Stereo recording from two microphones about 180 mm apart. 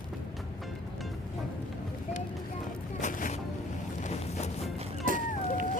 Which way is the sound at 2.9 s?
45° left (ahead or behind).